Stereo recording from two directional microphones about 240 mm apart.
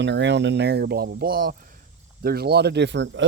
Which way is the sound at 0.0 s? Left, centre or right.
Right.